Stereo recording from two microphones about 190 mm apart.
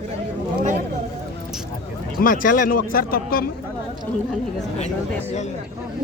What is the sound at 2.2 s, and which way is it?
Speech, 45° left (ahead or behind).